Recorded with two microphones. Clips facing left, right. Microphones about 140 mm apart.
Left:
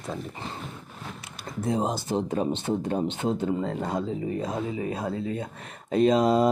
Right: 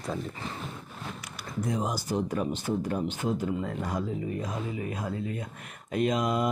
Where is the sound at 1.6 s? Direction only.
25° left (ahead or behind).